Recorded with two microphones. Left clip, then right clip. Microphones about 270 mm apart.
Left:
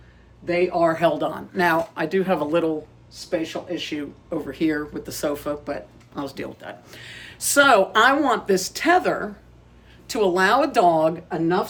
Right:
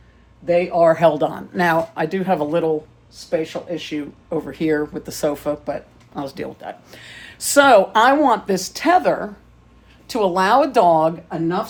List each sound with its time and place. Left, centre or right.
0.4 s speech: centre
3.8 s speech: centre